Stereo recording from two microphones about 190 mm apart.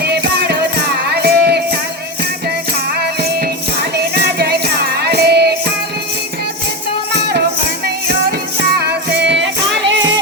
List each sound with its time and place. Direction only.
0.0 s music: 60° right (ahead or behind)
4.1 s music: 55° right (ahead or behind)
7.1 s music: 60° right (ahead or behind)
8.8 s music: 60° right (ahead or behind)